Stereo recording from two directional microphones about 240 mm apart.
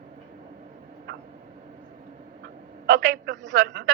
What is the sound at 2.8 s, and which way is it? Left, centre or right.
A man's voice, right.